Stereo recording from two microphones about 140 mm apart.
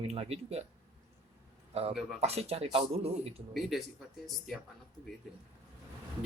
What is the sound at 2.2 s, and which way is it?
Speech, 50° right (ahead or behind).